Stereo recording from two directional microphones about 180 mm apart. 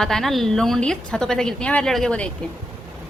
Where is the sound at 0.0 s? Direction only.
Centre (ahead or behind).